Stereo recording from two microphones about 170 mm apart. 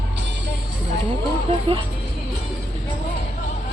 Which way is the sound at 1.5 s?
30° right (ahead or behind).